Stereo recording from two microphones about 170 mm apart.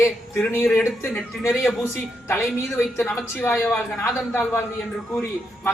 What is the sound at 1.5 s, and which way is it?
Speech, centre (ahead or behind).